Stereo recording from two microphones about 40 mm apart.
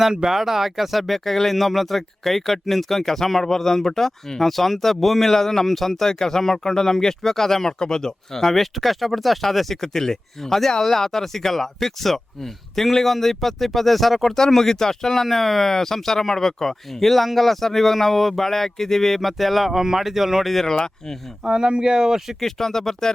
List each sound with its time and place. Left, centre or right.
0.0 s speech: centre
0.3 s speech: centre
19.8 s speech: centre
20.5 s speech: centre
20.7 s speech: centre
21.4 s speech: centre
22.4 s speech: centre